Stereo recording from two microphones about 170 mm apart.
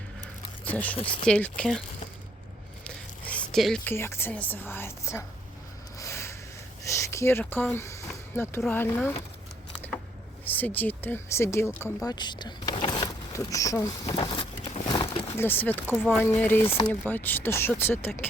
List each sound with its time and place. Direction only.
0.6 s speech: 10° left (ahead or behind)
0.9 s speech: 30° left (ahead or behind)
1.3 s speech: 5° left (ahead or behind)
2.8 s a sound: 10° left (ahead or behind)
3.5 s speech: 5° left (ahead or behind)
3.9 s speech: 15° left (ahead or behind)
6.0 s a sound: 15° left (ahead or behind)
6.8 s speech: 15° left (ahead or behind)
10.4 s speech: 10° left (ahead or behind)
12.1 s power windows: 25° left (ahead or behind)
13.8 s speech: 25° left (ahead or behind)
14.8 s a sound: 25° left (ahead or behind)
15.4 s speech: 10° left (ahead or behind)